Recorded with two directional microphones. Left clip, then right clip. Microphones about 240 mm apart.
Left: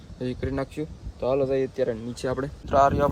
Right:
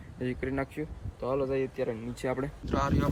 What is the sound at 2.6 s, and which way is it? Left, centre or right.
Speech, centre.